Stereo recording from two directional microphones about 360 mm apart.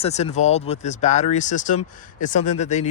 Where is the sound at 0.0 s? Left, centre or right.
Centre.